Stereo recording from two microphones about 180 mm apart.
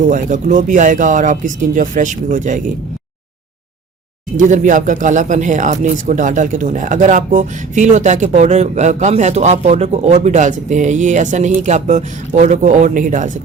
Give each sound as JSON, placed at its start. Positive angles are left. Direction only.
{"t": 0.1, "sound": "speech", "side_deg": -45}
{"t": 4.4, "sound": "speech", "side_deg": -45}